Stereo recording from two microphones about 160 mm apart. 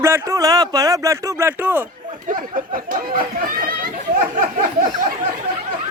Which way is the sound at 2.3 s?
60° right (ahead or behind).